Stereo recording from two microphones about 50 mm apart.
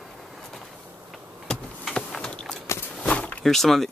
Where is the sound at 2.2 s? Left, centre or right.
Centre.